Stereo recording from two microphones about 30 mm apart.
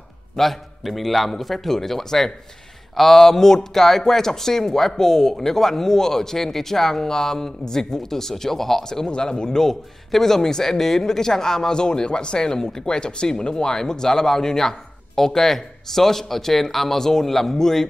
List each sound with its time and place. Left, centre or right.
0.4 s speech: centre
9.0 s speech: left
9.6 s speech: centre
11.7 s speech: left